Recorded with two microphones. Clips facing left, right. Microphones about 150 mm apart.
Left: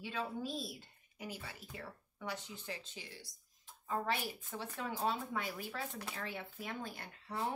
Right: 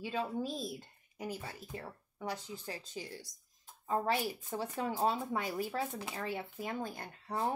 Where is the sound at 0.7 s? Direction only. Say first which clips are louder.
Right 6 dB; 40° right (ahead or behind).